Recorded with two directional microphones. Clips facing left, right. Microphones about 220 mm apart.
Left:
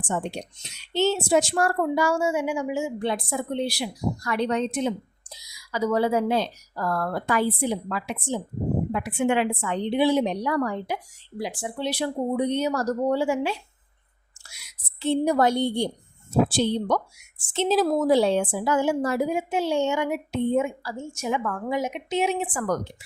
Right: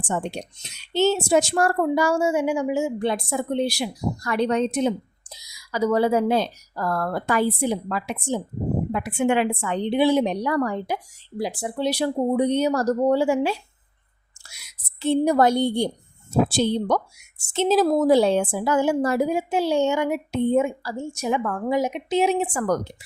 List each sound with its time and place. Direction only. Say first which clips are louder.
0.9 s a woman's voice: right 2 dB; 45° right (ahead or behind)
14.9 s a woman's voice: right 3 dB; 45° right (ahead or behind)